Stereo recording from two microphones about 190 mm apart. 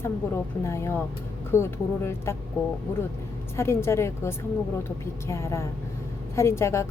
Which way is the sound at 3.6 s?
15° left (ahead or behind).